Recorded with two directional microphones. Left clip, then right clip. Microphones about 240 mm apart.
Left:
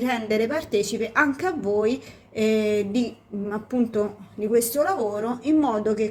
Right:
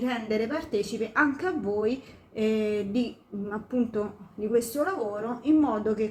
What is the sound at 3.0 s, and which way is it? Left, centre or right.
A woman's voice, centre.